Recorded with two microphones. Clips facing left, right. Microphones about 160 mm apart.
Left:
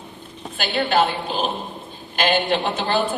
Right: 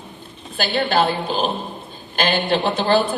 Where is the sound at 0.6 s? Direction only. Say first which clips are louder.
Right 1 dB; 35° right (ahead or behind).